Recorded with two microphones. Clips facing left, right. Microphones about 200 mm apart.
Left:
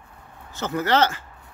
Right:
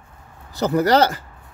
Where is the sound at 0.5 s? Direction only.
35° right (ahead or behind).